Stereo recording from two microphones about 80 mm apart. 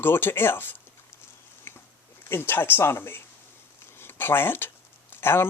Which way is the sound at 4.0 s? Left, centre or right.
Left.